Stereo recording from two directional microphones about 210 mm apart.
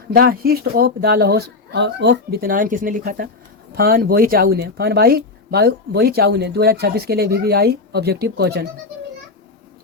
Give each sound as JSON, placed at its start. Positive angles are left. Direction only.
{"t": 0.1, "sound": "speech", "side_deg": -45}